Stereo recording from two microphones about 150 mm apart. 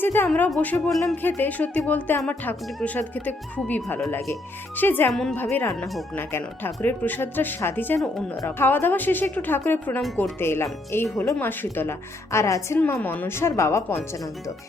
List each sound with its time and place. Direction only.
0.0 s a woman's voice: 15° left (ahead or behind)
0.9 s music: centre (ahead or behind)
1.1 s speech: 15° left (ahead or behind)